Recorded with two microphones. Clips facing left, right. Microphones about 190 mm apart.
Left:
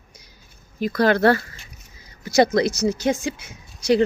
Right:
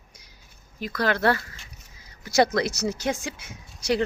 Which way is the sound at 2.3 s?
20° left (ahead or behind).